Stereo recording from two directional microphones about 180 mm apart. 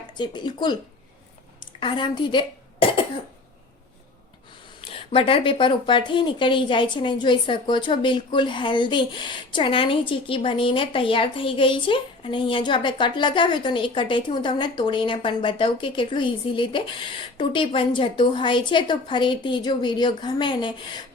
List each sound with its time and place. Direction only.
0.2 s a woman's voice: 25° left (ahead or behind)
1.8 s a woman's voice: 25° left (ahead or behind)
2.8 s cough: 30° left (ahead or behind)
4.8 s a woman's voice: 30° left (ahead or behind)